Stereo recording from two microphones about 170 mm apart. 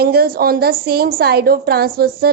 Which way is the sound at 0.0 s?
65° right (ahead or behind).